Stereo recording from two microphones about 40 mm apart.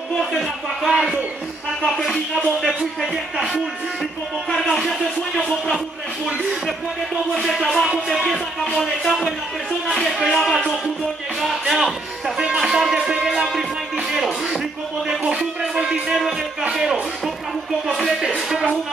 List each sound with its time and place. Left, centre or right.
0.2 s speech: centre
2.0 s music: centre
4.7 s speech: centre
7.4 s music: centre
8.7 s speech: centre
10.1 s music: centre
11.6 s music: centre
12.4 s speech: centre
14.1 s music: centre
15.0 s speech: centre
18.2 s speech: centre